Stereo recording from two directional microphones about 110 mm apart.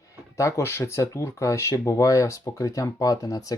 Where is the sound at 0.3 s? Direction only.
25° left (ahead or behind).